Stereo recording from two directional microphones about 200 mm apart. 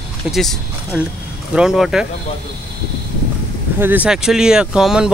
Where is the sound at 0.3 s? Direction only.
Centre (ahead or behind).